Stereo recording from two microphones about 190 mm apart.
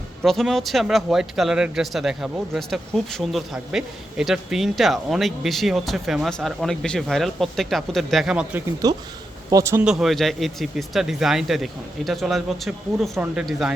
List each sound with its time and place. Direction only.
0.2 s speech: centre (ahead or behind)
8.8 s speech: 20° right (ahead or behind)
9.8 s speech: centre (ahead or behind)